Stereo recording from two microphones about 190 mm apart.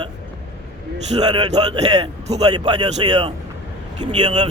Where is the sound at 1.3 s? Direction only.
25° right (ahead or behind).